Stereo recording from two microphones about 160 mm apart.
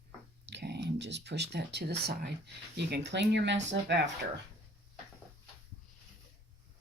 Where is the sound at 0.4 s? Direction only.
90° right.